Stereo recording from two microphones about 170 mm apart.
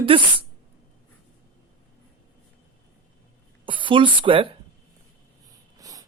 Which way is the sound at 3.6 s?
30° right (ahead or behind).